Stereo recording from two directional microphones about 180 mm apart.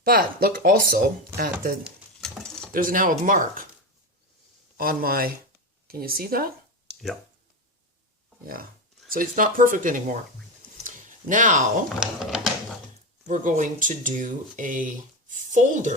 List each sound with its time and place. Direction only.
0.0 s speech: 55° right (ahead or behind)
1.8 s stir: centre (ahead or behind)
2.7 s speech: 50° right (ahead or behind)
4.8 s speech: 55° right (ahead or behind)
9.0 s speech: 50° right (ahead or behind)
10.8 s a sound: 45° right (ahead or behind)
11.9 s speech: 5° right (ahead or behind)
13.2 s speech: 45° right (ahead or behind)